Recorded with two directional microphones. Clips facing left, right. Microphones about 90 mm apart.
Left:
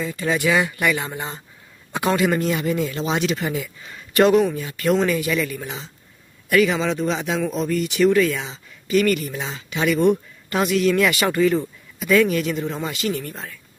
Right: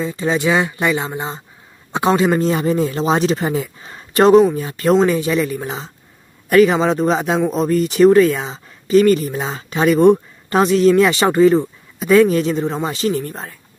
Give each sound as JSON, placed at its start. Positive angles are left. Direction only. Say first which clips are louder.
{"t": 0.0, "sound": "speech", "louder": "right 4 dB", "side_deg": -25}